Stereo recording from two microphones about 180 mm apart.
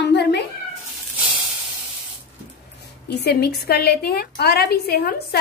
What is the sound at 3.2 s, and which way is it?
A woman's voice, 65° left (ahead or behind).